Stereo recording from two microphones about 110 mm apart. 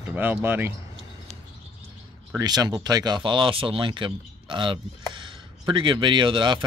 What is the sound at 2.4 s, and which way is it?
Speech, 35° right (ahead or behind).